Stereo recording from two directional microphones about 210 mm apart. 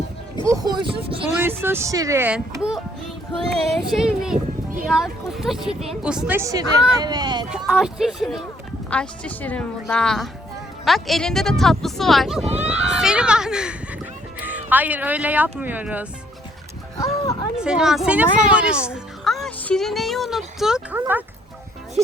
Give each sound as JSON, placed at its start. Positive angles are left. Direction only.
{"t": 0.4, "sound": "speech", "side_deg": -15}
{"t": 1.4, "sound": "speech", "side_deg": -10}
{"t": 7.5, "sound": "speech", "side_deg": -5}
{"t": 12.5, "sound": "speech", "side_deg": -30}
{"t": 12.7, "sound": "speech", "side_deg": -5}
{"t": 17.6, "sound": "speech", "side_deg": -5}